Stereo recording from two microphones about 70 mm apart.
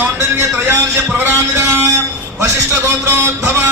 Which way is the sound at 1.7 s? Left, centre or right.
Right.